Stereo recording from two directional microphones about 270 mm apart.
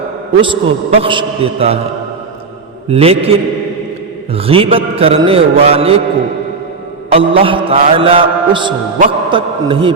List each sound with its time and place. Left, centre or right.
0.4 s mantra: centre
2.9 s mantra: right
7.1 s mantra: centre